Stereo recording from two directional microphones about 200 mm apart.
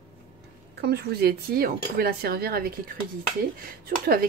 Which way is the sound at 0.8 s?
55° right (ahead or behind).